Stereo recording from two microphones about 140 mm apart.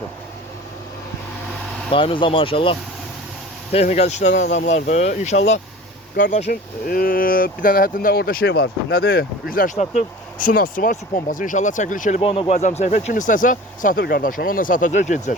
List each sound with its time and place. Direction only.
1.9 s speech: 40° left (ahead or behind); by 5.5 s 55° left (ahead or behind)
6.1 s speech: 80° left
6.5 s speech: 90° left
9.7 s speech: 55° left (ahead or behind)
10.4 s speech: 75° left (ahead or behind)
12.2 s speech: 45° left (ahead or behind); by 15.4 s 60° left (ahead or behind)